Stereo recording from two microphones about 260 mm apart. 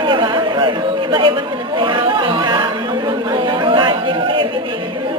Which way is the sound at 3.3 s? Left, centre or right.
Centre.